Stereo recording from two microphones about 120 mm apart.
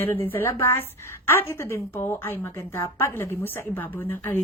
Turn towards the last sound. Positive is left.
turn(degrees=20)  # may be behind; listen again after turning